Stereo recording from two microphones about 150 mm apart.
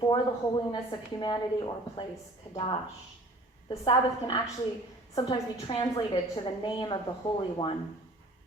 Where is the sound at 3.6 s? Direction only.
30° left (ahead or behind).